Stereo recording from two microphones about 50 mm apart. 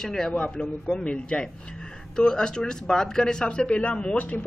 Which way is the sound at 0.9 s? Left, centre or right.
Left.